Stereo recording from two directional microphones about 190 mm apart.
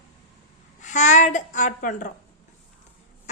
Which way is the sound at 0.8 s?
40° left (ahead or behind).